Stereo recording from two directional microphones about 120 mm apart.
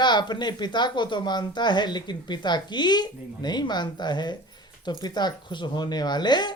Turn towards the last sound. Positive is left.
turn(degrees=40)  # may be behind; listen again after turning